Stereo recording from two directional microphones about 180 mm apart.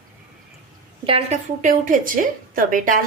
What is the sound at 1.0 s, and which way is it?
Speech, 30° right (ahead or behind).